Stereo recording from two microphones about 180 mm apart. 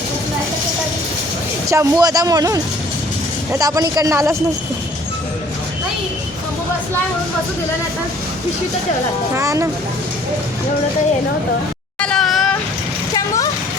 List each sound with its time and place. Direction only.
1.7 s speech: 20° right (ahead or behind)
9.3 s speech: 15° right (ahead or behind)
11.9 s a sound: 5° left (ahead or behind)
13.1 s vehicle: 20° left (ahead or behind)